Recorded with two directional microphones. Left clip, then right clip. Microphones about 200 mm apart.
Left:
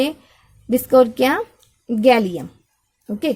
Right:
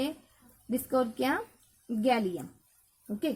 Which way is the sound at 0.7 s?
40° left (ahead or behind).